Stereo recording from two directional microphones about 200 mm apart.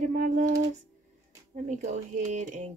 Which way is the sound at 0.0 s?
40° right (ahead or behind).